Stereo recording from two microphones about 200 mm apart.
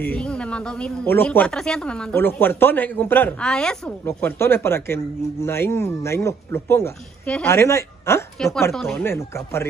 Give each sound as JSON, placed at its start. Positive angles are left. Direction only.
{"t": 0.0, "sound": "speech", "side_deg": 5}